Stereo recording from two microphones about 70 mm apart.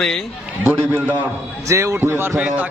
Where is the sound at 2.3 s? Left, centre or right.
Right.